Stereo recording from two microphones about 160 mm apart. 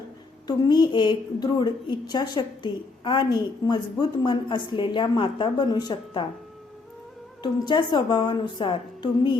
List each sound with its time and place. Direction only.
0.4 s a woman's voice: 25° left (ahead or behind)
7.4 s a woman's voice: 30° left (ahead or behind)